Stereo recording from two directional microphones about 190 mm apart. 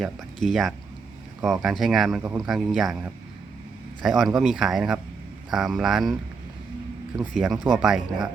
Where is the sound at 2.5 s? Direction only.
Centre (ahead or behind).